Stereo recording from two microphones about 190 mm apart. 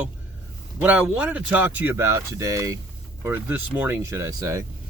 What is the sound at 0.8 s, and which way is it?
Speech, 5° right (ahead or behind).